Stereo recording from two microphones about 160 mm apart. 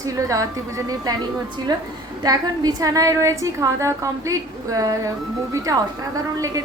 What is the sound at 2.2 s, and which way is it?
A woman's voice, 25° right (ahead or behind).